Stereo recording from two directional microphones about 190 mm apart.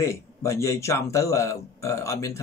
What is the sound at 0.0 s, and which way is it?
Speech, 15° left (ahead or behind).